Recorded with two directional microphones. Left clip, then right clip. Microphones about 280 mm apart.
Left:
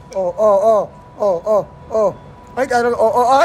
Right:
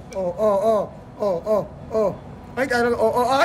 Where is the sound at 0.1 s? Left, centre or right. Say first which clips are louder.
Left 7 dB; centre.